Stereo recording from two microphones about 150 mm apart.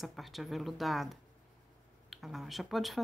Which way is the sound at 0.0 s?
Centre (ahead or behind).